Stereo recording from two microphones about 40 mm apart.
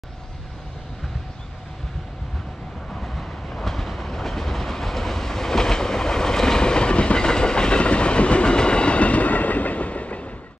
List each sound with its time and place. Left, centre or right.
2.9 s train: centre; by 10.3 s left